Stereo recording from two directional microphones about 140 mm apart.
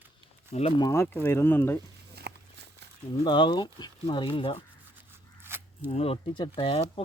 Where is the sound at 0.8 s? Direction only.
20° left (ahead or behind).